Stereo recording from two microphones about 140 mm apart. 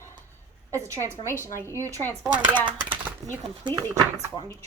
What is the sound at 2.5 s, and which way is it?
Speech, 35° right (ahead or behind).